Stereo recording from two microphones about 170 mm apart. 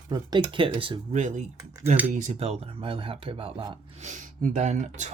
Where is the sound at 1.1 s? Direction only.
45° right (ahead or behind).